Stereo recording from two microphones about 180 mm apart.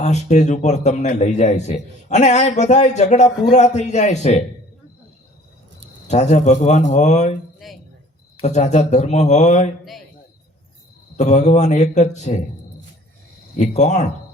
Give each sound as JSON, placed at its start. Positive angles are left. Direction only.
{"t": 0.0, "sound": "a man's voice", "side_deg": 40}
{"t": 6.1, "sound": "a man's voice", "side_deg": 40}
{"t": 7.6, "sound": "speech", "side_deg": 0}
{"t": 8.4, "sound": "a man's voice", "side_deg": 40}
{"t": 11.2, "sound": "a man's voice", "side_deg": 40}
{"t": 13.6, "sound": "a man's voice", "side_deg": 40}